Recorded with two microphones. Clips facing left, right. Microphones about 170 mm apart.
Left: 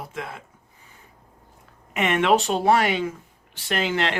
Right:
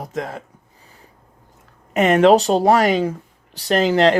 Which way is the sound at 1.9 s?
40° right (ahead or behind).